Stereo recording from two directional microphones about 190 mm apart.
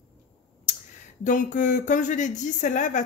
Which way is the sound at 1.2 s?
40° left (ahead or behind).